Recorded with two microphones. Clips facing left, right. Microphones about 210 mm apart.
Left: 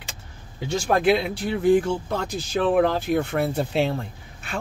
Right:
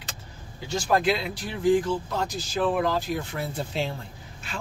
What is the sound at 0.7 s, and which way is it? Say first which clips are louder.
Speech: left 4 dB; 60° left (ahead or behind).